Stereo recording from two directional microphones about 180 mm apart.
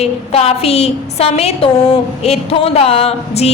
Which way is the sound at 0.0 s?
35° left (ahead or behind).